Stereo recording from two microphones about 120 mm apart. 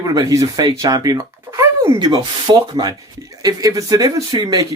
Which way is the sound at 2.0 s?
35° right (ahead or behind).